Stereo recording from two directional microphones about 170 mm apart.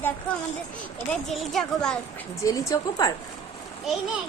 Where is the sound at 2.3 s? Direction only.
20° left (ahead or behind).